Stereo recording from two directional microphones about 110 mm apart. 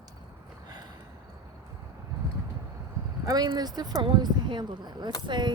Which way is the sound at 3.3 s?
40° right (ahead or behind).